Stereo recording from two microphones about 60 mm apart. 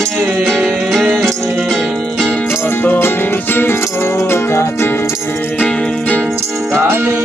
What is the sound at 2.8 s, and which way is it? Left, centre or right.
Music, left.